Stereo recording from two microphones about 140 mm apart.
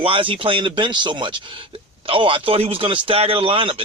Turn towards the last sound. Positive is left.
turn(degrees=-40)  # may be behind; listen again after turning